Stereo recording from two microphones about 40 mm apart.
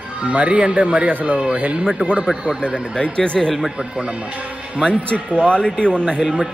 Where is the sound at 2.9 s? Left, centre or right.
Left.